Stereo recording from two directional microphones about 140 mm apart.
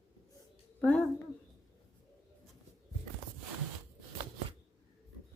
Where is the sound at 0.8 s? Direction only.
10° left (ahead or behind).